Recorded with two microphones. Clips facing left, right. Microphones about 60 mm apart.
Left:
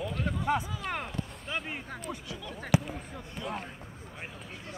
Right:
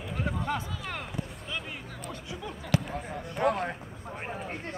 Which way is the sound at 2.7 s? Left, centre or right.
Centre.